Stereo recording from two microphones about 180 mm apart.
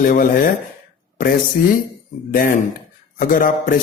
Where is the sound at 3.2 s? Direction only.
50° left (ahead or behind).